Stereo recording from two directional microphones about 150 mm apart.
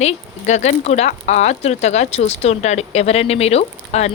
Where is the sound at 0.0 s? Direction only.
50° left (ahead or behind).